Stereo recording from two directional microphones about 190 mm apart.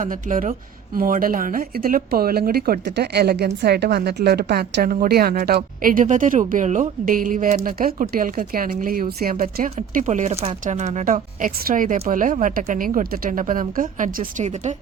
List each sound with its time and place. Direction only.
0.0 s speech: 45° right (ahead or behind)